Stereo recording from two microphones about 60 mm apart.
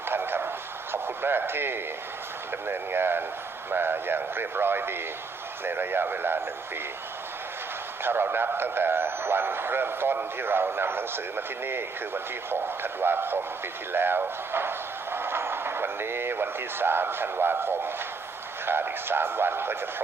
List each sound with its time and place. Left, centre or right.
0.1 s a sound: right
2.5 s speech: right
8.0 s speech: right